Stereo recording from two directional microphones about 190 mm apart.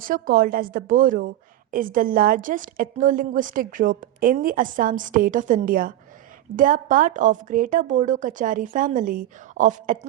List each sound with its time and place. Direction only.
0.0 s a woman's voice: 45° right (ahead or behind)